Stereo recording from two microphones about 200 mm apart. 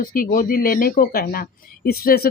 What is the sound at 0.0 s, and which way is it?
Speech, 45° left (ahead or behind).